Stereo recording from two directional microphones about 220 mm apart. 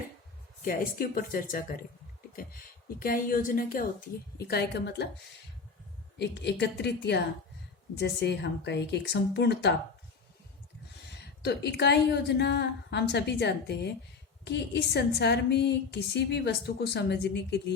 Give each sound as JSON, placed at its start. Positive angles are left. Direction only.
{"t": 0.6, "sound": "speech", "side_deg": 40}
{"t": 3.0, "sound": "a woman's voice", "side_deg": 40}
{"t": 6.1, "sound": "a woman's voice", "side_deg": 50}
{"t": 11.4, "sound": "a woman's voice", "side_deg": 50}